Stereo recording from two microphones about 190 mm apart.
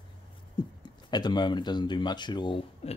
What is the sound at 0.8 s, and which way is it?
Speech, 25° left (ahead or behind).